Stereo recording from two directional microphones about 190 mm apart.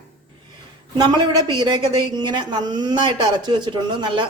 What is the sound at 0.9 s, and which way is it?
A woman's voice, 20° right (ahead or behind).